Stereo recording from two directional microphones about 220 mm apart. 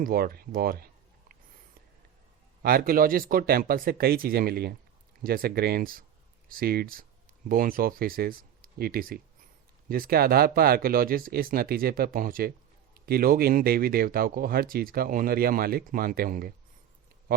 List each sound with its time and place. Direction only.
0.0 s speech: 40° right (ahead or behind)
2.6 s speech: 40° right (ahead or behind)